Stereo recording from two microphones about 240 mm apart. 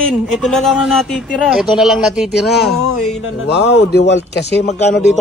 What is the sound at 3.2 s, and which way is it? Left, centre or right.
Speech, left.